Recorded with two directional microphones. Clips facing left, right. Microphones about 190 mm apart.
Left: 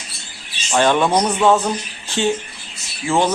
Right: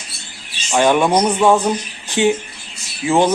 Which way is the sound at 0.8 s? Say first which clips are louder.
Right 2 dB; 15° right (ahead or behind).